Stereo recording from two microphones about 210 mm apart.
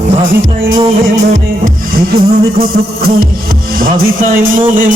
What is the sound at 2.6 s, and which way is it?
Music, 45° right (ahead or behind).